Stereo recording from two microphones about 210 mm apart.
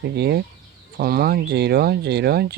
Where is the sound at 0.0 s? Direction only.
50° right (ahead or behind).